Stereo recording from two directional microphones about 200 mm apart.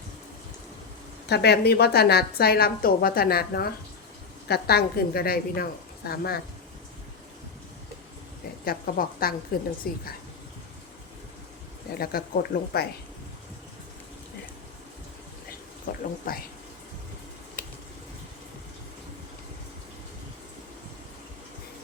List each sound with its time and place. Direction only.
1.3 s a woman's voice: 55° left (ahead or behind)
8.6 s a woman's voice: 50° left (ahead or behind)
11.9 s a woman's voice: 50° left (ahead or behind)
15.9 s a woman's voice: 45° left (ahead or behind)